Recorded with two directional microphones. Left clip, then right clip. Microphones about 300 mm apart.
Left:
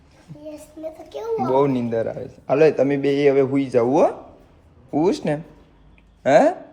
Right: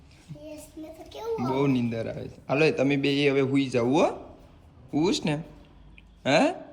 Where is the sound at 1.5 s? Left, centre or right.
Centre.